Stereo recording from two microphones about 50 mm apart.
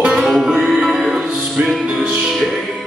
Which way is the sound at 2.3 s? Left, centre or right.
Centre.